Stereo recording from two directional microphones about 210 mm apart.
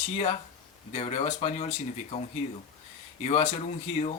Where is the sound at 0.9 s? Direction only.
30° left (ahead or behind).